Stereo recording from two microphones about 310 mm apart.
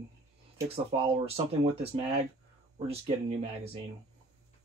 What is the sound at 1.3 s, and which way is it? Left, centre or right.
Speech, centre.